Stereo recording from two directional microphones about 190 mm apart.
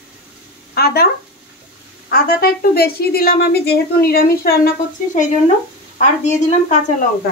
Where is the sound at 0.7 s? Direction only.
55° left (ahead or behind).